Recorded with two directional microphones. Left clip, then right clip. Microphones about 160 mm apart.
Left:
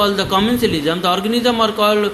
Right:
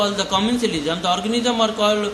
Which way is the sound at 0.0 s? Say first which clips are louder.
Left 4 dB; 30° left (ahead or behind).